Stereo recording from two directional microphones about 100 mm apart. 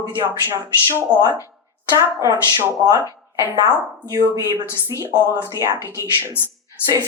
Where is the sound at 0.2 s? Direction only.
25° right (ahead or behind).